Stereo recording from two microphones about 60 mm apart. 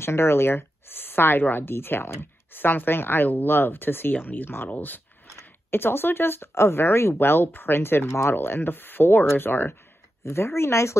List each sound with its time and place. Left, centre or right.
0.0 s a woman's voice: left
10.2 s speech: left